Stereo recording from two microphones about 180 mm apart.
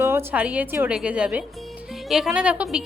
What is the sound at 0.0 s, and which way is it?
A woman's voice, 10° right (ahead or behind).